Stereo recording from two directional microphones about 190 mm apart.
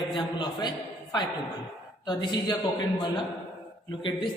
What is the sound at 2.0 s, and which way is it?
Speech, 25° left (ahead or behind).